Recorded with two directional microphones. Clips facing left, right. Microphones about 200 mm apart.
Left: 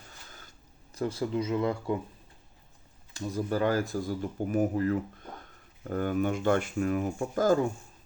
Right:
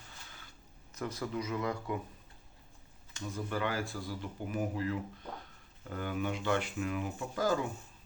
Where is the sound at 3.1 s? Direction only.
35° left (ahead or behind).